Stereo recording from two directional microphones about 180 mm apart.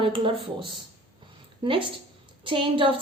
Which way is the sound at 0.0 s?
30° right (ahead or behind).